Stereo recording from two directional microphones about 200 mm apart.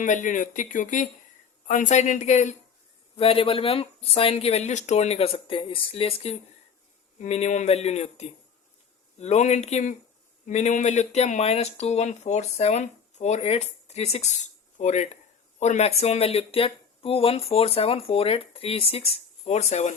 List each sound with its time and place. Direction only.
0.0 s speech: 40° left (ahead or behind)